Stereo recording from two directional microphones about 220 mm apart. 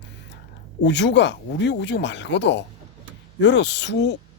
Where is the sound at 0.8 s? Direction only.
55° left (ahead or behind).